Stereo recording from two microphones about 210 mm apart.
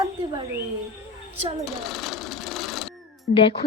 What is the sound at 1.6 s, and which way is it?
Sewing machine, centre (ahead or behind).